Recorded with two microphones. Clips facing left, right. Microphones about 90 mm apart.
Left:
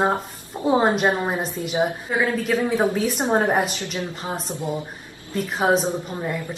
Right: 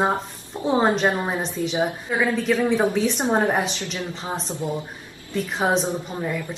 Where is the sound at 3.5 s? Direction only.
5° left (ahead or behind).